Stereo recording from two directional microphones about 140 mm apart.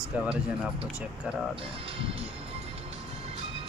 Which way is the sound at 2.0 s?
45° right (ahead or behind).